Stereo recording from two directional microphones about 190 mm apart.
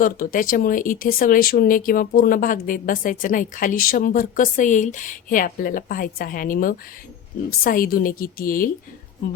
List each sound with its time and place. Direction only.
0.0 s speech: 45° left (ahead or behind)